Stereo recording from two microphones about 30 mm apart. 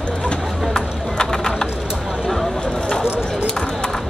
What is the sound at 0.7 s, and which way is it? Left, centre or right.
Clip-clop, left.